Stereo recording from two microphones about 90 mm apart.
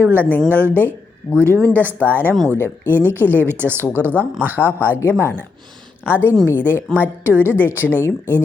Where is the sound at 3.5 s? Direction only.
25° right (ahead or behind).